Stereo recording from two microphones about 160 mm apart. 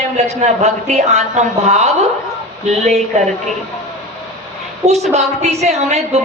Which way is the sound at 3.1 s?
45° right (ahead or behind).